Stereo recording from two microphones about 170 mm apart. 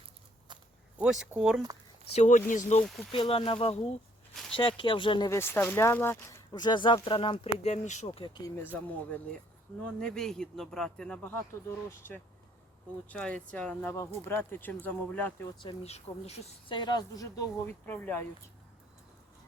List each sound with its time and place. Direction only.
0.9 s speech: 5° right (ahead or behind)
2.1 s speech: 45° left (ahead or behind)
2.8 s speech: centre (ahead or behind)
3.1 s speech: 30° left (ahead or behind)
5.3 s speech: 15° left (ahead or behind); by 8.2 s 40° left (ahead or behind)
8.2 s speech: 25° left (ahead or behind)
8.6 s speech: 10° left (ahead or behind)
15.6 s speech: 40° left (ahead or behind)
16.7 s speech: 25° left (ahead or behind)